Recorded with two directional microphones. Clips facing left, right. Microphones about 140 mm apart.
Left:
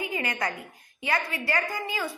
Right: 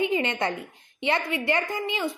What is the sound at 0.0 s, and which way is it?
A woman's voice, 25° right (ahead or behind).